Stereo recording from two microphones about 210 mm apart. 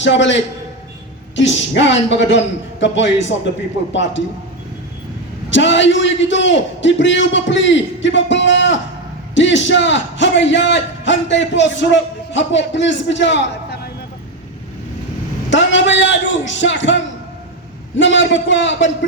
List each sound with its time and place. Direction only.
0.0 s a man's voice: 60° left (ahead or behind)
5.5 s a man's voice: 60° left (ahead or behind)
15.4 s a man's voice: 60° left (ahead or behind)